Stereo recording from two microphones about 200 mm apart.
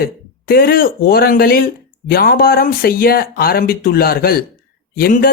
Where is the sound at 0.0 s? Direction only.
50° left (ahead or behind).